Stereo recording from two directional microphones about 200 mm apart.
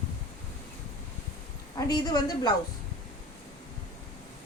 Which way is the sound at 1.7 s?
20° left (ahead or behind).